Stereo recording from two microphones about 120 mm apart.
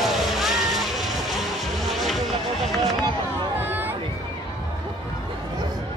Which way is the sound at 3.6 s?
15° right (ahead or behind).